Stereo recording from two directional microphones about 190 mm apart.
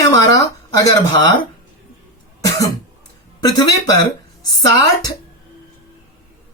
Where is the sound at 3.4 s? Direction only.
20° left (ahead or behind).